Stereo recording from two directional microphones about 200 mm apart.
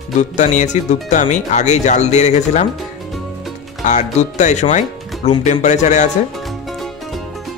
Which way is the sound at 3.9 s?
35° left (ahead or behind).